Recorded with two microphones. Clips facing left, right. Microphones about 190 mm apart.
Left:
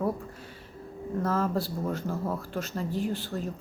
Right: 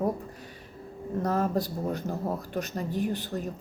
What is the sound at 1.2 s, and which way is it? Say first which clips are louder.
Speech: right 1 dB; 20° right (ahead or behind).